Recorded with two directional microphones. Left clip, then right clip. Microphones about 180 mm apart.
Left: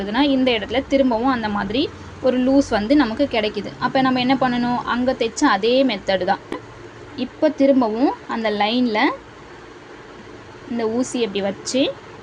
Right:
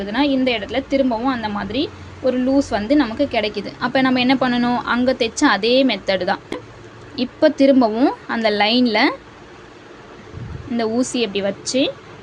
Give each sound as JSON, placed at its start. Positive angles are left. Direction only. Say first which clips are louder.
{"t": 0.0, "sound": "a woman's voice", "louder": "even", "side_deg": 0}
{"t": 10.8, "sound": "a woman's voice", "louder": "right 1 dB", "side_deg": -15}